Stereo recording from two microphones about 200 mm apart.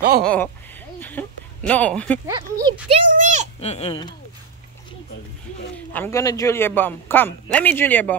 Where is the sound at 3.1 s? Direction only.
40° right (ahead or behind).